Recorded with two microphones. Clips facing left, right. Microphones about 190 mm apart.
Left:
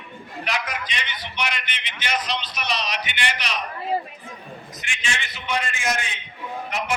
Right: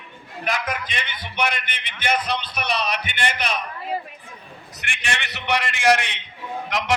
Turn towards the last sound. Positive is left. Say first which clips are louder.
# right 2 dB
turn(degrees=-90)